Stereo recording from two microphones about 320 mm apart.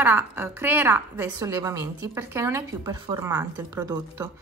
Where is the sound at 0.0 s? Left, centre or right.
Centre.